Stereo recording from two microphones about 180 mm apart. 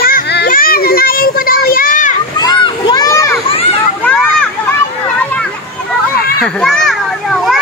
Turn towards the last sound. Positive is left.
turn(degrees=0)  # may be behind; listen again after turning